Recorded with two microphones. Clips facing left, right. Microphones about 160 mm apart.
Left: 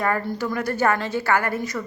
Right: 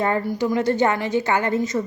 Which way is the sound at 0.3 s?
15° right (ahead or behind).